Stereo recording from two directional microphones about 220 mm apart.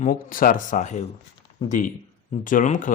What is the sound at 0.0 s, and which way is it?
Speech, 40° left (ahead or behind).